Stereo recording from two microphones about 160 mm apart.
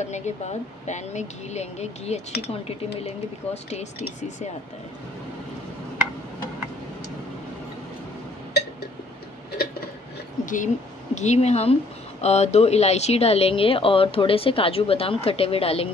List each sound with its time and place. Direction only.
0.0 s speech: 45° left (ahead or behind)
2.3 s speech: 90° left
10.4 s a woman's voice: 55° left (ahead or behind); by 15.9 s 40° left (ahead or behind)